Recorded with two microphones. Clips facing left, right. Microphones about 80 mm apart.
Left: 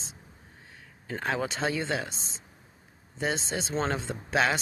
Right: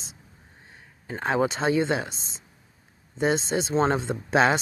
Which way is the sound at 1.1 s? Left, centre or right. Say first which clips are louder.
Right 6 dB; right.